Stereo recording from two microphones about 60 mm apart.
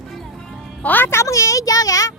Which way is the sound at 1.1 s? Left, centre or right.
Left.